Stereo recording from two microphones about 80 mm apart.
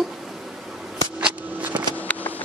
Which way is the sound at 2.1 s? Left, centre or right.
Left.